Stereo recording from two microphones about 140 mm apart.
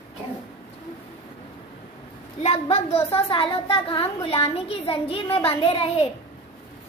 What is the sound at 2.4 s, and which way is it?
Speech, 50° left (ahead or behind).